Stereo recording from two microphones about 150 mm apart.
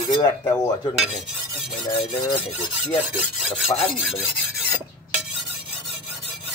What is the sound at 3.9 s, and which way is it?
Filing, centre (ahead or behind).